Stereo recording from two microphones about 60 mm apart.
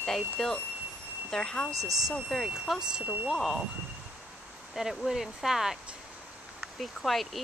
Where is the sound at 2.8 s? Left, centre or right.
Centre.